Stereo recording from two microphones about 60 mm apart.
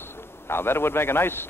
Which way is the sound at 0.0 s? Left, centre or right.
Left.